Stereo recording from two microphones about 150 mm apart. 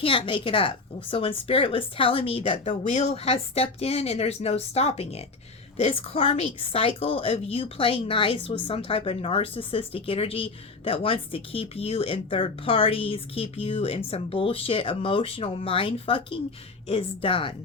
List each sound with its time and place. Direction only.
0.0 s speech: 35° left (ahead or behind)